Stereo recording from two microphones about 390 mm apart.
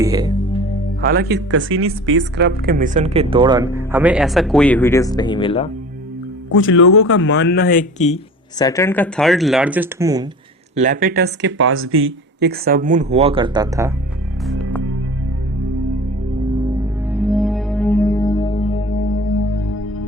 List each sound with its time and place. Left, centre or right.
0.0 s speech: centre
1.0 s speech: right; by 5.7 s centre
6.5 s speech: left; by 10.2 s centre
10.8 s speech: centre
14.4 s music: centre
16.8 s music: centre; by 20.1 s left